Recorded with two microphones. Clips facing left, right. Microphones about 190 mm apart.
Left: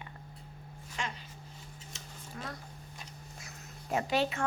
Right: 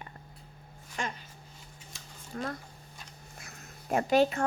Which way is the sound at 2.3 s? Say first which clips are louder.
Right 7 dB; 50° right (ahead or behind).